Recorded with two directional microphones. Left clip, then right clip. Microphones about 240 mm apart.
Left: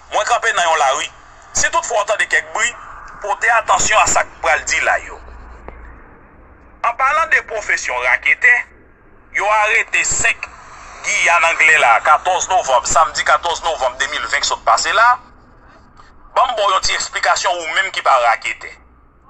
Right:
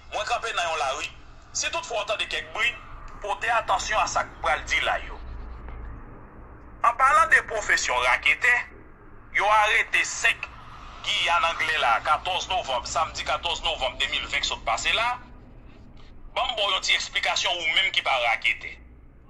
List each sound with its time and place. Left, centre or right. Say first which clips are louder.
0.1 s a sound: left 12 dB; left
3.2 s speech: left 10 dB; centre
6.8 s a man's voice: left 4 dB; centre
16.3 s speech: left 11 dB; centre